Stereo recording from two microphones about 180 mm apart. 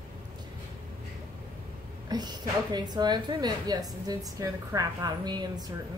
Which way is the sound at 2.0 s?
25° right (ahead or behind).